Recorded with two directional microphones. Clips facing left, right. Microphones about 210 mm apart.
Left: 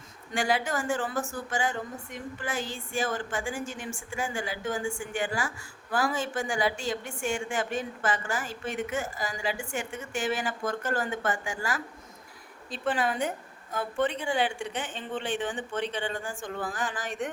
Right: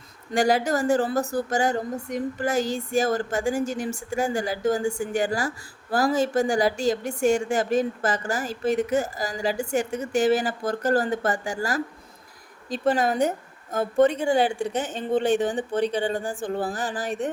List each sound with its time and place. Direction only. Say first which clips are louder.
0.3 s a woman's voice: right 7 dB; 40° right (ahead or behind)